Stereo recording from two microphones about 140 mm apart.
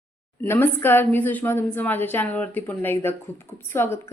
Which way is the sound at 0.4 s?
15° left (ahead or behind).